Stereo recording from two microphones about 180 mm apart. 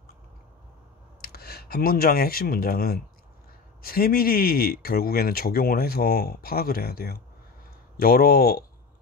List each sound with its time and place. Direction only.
1.2 s speech: 60° left (ahead or behind)